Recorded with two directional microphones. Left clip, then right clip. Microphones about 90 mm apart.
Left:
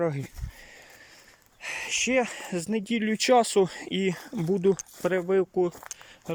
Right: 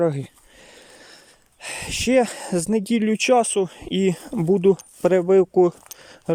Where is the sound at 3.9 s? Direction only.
45° right (ahead or behind).